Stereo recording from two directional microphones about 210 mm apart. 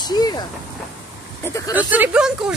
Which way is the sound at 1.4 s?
15° left (ahead or behind).